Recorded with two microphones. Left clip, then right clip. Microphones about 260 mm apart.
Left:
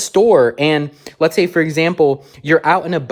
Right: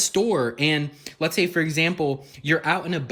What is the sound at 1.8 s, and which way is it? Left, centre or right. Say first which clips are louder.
Speech: left 6 dB; left.